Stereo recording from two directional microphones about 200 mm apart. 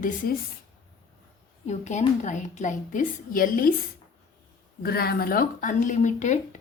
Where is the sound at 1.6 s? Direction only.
35° left (ahead or behind).